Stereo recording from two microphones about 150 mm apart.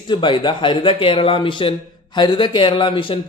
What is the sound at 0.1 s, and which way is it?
Speech, 30° left (ahead or behind).